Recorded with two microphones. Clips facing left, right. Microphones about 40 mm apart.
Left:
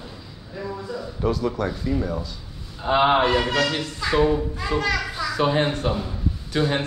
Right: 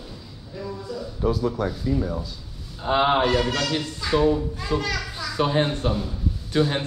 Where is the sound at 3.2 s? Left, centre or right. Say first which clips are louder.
Left 2 dB; centre.